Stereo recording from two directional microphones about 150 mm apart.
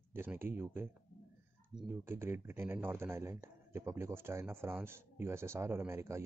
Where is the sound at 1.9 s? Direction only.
15° right (ahead or behind).